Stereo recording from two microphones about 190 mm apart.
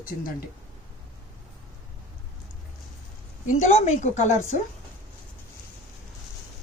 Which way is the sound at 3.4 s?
40° left (ahead or behind).